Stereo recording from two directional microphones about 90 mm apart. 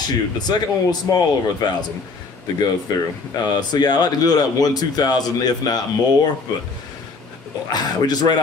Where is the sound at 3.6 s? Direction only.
50° left (ahead or behind).